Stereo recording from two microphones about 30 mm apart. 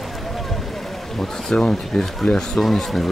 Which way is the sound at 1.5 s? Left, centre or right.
Left.